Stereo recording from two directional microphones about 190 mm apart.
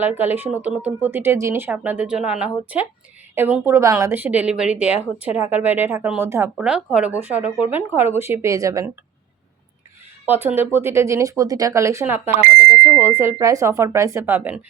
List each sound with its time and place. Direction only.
0.0 s speech: 10° right (ahead or behind)
10.2 s speech: 10° right (ahead or behind)